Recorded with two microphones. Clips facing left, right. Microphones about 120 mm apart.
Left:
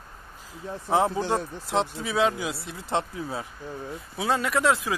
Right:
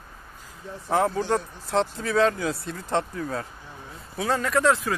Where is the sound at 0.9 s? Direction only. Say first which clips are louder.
Right 1 dB; 20° left (ahead or behind).